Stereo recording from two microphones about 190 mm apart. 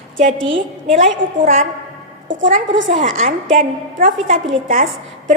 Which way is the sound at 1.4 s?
45° right (ahead or behind).